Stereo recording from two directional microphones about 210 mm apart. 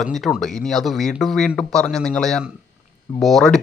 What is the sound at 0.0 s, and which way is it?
Speech, centre (ahead or behind).